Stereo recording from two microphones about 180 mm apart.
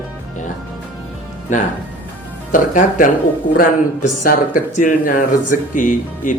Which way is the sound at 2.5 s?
50° left (ahead or behind).